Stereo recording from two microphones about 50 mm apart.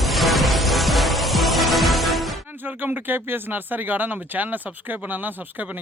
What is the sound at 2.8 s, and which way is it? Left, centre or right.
Speech, right.